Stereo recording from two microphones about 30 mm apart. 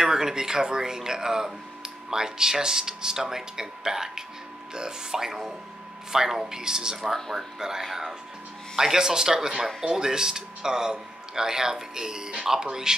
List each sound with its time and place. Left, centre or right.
0.0 s speech: centre
7.8 s speech: centre